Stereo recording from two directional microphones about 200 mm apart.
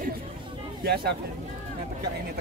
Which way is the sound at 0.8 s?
50° right (ahead or behind).